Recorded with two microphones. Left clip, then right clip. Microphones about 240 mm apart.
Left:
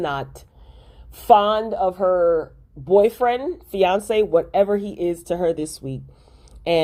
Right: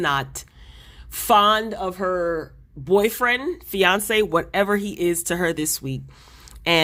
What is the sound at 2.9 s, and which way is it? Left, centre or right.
Speech, right.